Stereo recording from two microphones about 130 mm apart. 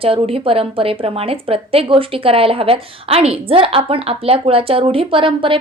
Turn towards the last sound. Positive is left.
turn(degrees=-40)  # may be behind; listen again after turning